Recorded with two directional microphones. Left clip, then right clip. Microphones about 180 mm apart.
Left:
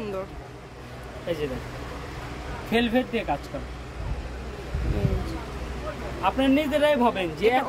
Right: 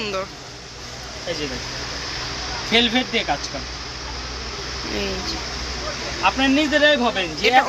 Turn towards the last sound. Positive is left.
turn(degrees=0)  # may be behind; listen again after turning